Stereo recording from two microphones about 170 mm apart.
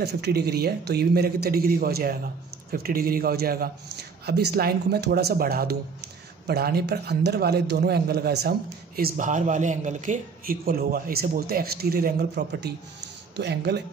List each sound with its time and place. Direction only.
0.0 s a man's voice: 75° right (ahead or behind)
4.3 s a man's voice: 70° right (ahead or behind)